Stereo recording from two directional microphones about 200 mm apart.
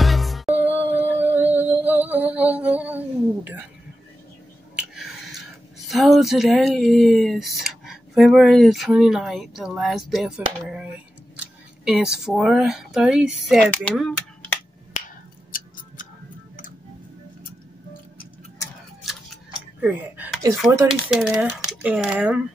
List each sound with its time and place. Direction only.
0.0 s music: centre (ahead or behind)
5.9 s speech: centre (ahead or behind)
15.5 s tick-tock: 45° left (ahead or behind)
19.0 s camera: 5° right (ahead or behind)
20.9 s speech: 5° right (ahead or behind)